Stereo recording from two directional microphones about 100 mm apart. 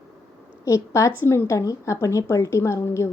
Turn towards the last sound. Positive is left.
turn(degrees=30)  # may be behind; listen again after turning